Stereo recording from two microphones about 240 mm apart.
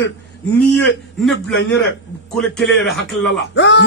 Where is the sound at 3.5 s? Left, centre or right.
Left.